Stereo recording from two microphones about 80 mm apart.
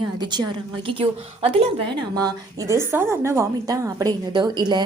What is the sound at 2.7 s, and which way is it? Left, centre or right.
Speech, right.